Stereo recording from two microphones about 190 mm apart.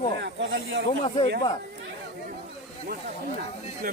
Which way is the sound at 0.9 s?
30° left (ahead or behind).